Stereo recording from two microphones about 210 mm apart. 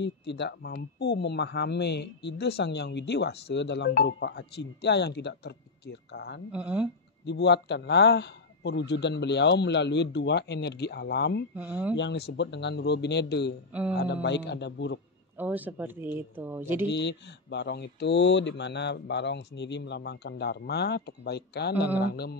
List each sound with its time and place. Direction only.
0.0 s speech: 55° left (ahead or behind)
6.5 s speech: 5° right (ahead or behind)
7.2 s speech: 55° left (ahead or behind)
11.5 s speech: 10° right (ahead or behind)
12.0 s speech: 55° left (ahead or behind)
15.3 s speech: 10° right (ahead or behind)
16.9 s speech: 55° left (ahead or behind)